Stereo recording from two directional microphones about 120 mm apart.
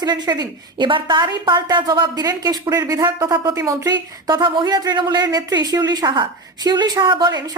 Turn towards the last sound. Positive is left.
turn(degrees=-35)  # may be behind; listen again after turning